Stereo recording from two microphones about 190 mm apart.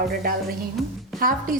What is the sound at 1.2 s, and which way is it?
Speech, 50° right (ahead or behind).